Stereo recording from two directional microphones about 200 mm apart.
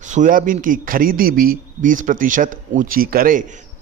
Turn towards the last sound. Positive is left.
turn(degrees=-40)  # may be behind; listen again after turning